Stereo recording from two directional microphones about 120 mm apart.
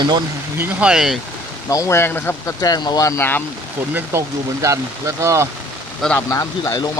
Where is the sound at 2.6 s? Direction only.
35° left (ahead or behind).